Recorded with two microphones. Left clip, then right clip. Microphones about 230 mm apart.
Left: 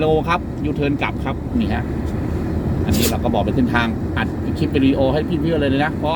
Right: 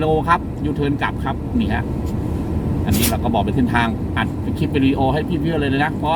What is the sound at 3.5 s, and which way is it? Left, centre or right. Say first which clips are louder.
Speech: even; centre.